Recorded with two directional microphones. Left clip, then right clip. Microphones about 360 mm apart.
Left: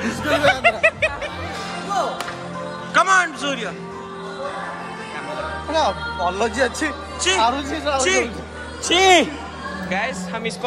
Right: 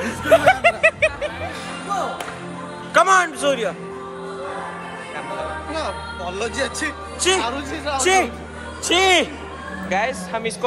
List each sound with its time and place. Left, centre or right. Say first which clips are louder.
0.0 s snicker: right 3 dB; centre
2.9 s music: right 1 dB; centre
5.7 s speech: left 6 dB; left
7.2 s speech: even; centre
7.4 s speech: left 5 dB; left
8.0 s speech: right 6 dB; centre